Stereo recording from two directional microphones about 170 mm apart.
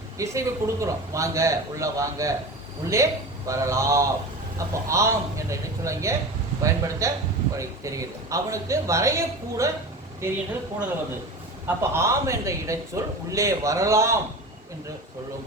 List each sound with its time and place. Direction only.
0.2 s a man's voice: 20° right (ahead or behind)
11.6 s a man's voice: 15° right (ahead or behind)